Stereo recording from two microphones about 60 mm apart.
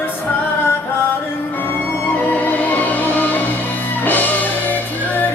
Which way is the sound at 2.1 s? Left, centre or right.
Left.